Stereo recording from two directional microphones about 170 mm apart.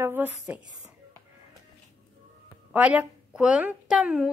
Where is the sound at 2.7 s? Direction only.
10° right (ahead or behind).